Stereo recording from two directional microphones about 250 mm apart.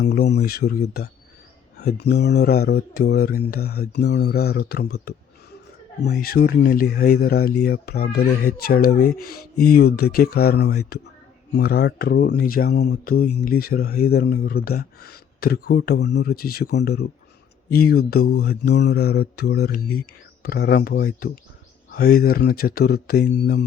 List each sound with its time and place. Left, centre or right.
0.0 s speech: left